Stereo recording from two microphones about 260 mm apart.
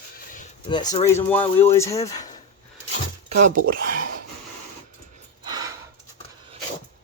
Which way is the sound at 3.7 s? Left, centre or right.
Right.